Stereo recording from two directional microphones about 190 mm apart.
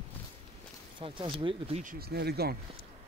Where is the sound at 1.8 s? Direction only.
50° right (ahead or behind).